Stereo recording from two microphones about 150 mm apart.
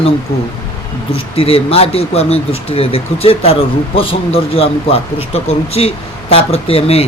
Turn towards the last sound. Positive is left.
turn(degrees=40)  # may be behind; listen again after turning